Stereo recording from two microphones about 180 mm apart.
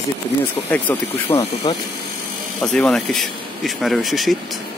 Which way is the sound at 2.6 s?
5° left (ahead or behind).